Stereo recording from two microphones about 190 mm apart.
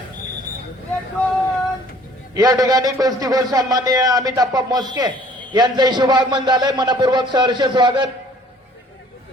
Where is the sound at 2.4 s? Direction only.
20° right (ahead or behind).